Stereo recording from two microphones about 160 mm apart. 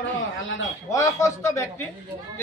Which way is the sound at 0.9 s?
20° left (ahead or behind).